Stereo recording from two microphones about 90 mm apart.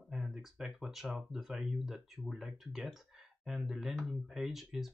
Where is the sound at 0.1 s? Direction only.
5° right (ahead or behind).